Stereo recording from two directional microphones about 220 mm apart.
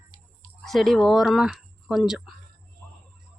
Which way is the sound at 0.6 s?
Centre (ahead or behind).